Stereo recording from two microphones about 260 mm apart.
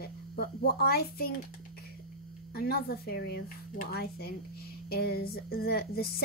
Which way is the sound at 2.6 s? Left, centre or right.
Left.